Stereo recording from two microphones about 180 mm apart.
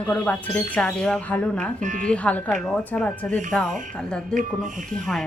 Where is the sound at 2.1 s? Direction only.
5° left (ahead or behind).